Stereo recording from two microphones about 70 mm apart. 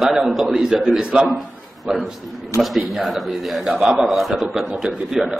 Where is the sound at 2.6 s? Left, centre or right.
Centre.